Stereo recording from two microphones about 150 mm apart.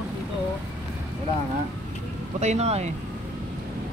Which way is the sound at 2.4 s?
45° right (ahead or behind).